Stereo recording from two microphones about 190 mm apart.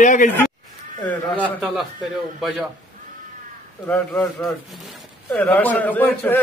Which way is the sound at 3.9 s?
5° left (ahead or behind).